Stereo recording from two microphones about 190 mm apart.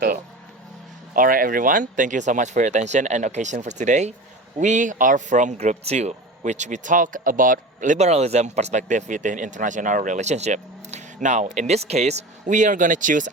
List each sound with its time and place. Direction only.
1.1 s speech: 45° right (ahead or behind)